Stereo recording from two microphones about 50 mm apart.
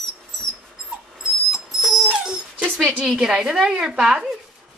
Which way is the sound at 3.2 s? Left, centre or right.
Centre.